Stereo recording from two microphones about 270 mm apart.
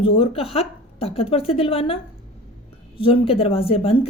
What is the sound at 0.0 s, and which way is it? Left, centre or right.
A woman's voice, left.